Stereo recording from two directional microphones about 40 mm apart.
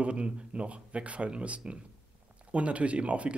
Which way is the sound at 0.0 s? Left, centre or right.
Right.